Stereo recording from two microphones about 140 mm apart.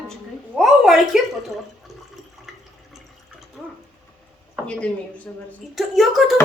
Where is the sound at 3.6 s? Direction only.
Centre (ahead or behind).